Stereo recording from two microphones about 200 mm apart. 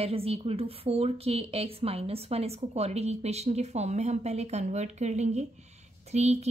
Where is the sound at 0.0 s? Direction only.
30° right (ahead or behind).